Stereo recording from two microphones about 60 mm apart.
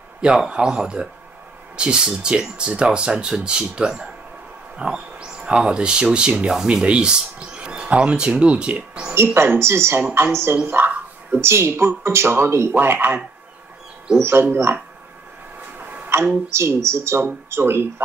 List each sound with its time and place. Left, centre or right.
0.2 s speech: centre
9.1 s a woman's voice: right
12.7 s speech: right
14.4 s speech: right
16.1 s a woman's voice: right